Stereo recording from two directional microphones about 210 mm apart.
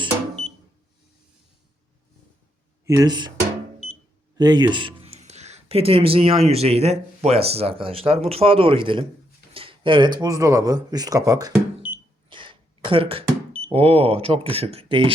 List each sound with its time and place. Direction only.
2.8 s speech: 15° right (ahead or behind)
4.4 s speech: 20° right (ahead or behind)
12.3 s a sound: 25° right (ahead or behind)
13.7 s speech: 25° right (ahead or behind)